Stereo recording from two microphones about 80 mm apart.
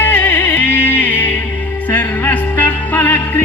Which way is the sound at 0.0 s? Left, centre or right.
Left.